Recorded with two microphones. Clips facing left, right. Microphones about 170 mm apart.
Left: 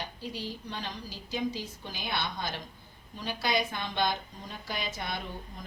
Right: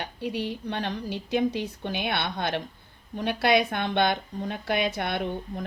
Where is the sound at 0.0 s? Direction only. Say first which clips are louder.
Right 7 dB; 65° right (ahead or behind).